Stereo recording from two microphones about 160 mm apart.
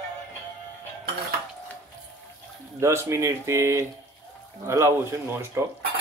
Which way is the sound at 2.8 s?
15° right (ahead or behind).